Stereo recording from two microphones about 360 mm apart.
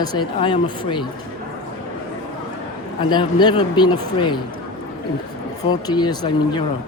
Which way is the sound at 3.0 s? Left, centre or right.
Centre.